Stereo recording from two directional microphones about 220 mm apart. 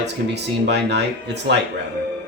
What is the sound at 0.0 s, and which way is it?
Speech, 50° right (ahead or behind).